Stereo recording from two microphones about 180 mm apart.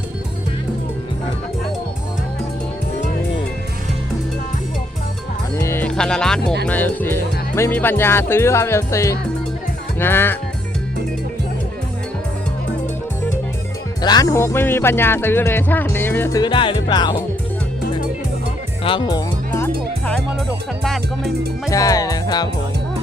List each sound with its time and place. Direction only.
5.5 s music: 15° left (ahead or behind)
6.7 s speech: 10° left (ahead or behind)
14.0 s speech: 20° left (ahead or behind)
16.4 s speech: 25° left (ahead or behind)
18.8 s speech: 30° left (ahead or behind)
20.8 s music: centre (ahead or behind)
21.7 s speech: 20° left (ahead or behind)